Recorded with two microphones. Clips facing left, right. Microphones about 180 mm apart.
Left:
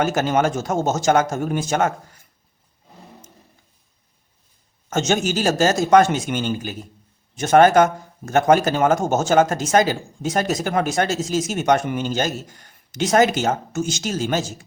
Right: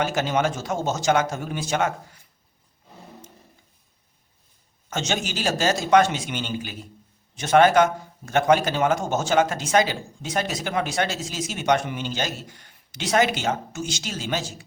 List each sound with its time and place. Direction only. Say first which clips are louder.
0.0 s speech: left 4 dB; 45° left (ahead or behind)
4.9 s speech: left 7 dB; 45° left (ahead or behind)